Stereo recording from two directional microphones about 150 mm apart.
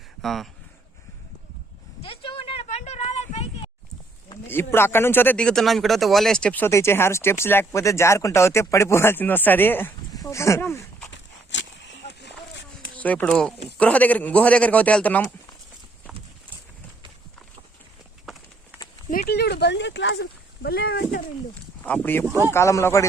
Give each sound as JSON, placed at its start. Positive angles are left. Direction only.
{"t": 0.2, "sound": "speech", "side_deg": 0}
{"t": 2.0, "sound": "a sound", "side_deg": 35}
{"t": 4.4, "sound": "speech", "side_deg": 15}
{"t": 13.0, "sound": "speech", "side_deg": 10}
{"t": 19.1, "sound": "speech", "side_deg": 80}
{"t": 21.8, "sound": "speech", "side_deg": 10}
{"t": 22.3, "sound": "speech", "side_deg": -20}
{"t": 22.5, "sound": "speech", "side_deg": 20}